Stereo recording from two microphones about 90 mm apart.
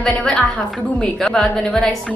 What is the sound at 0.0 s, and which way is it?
A woman's voice, 10° left (ahead or behind).